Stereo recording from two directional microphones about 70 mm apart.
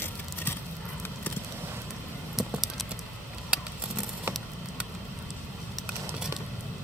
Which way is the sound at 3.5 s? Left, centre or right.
Centre.